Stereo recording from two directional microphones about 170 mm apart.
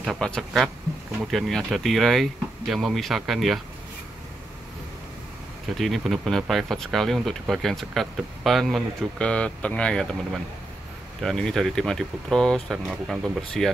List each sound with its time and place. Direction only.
0.0 s speech: 5° left (ahead or behind)
5.8 s speech: centre (ahead or behind)